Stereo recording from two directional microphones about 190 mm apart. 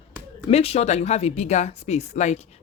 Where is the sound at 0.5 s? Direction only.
35° left (ahead or behind).